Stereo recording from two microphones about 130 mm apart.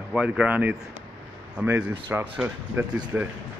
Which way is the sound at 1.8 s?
10° right (ahead or behind).